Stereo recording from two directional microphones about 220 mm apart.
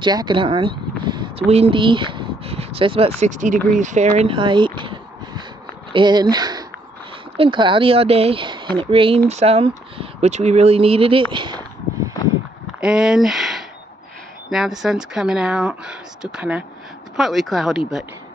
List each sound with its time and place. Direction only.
0.0 s speech: 20° right (ahead or behind)
3.7 s a sound: 35° right (ahead or behind)
5.9 s speech: 20° right (ahead or behind)
12.8 s speech: 5° right (ahead or behind)